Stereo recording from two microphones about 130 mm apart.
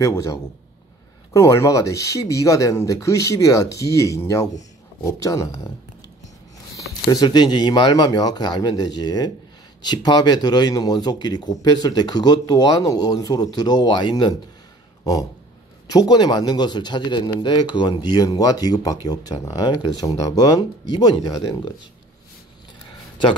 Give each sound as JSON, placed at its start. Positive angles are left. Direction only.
{"t": 0.0, "sound": "speech", "side_deg": 25}
{"t": 7.1, "sound": "speech", "side_deg": 30}
{"t": 16.1, "sound": "speech", "side_deg": 30}